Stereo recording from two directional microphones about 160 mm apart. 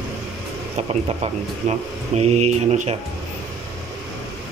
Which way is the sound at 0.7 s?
45° right (ahead or behind).